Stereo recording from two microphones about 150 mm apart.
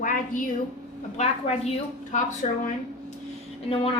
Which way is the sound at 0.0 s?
60° left (ahead or behind).